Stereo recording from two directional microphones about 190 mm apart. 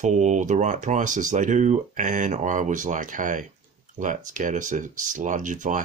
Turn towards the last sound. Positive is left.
turn(degrees=-40)  # may be behind; listen again after turning